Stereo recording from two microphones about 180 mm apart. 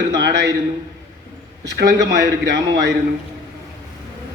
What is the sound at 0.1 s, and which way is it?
Speech, 70° right (ahead or behind).